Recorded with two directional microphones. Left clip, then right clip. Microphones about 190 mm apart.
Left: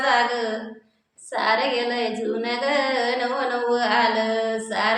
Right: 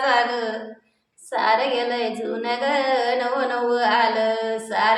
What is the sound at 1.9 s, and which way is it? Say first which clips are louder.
A woman's voice: even; 5° right (ahead or behind).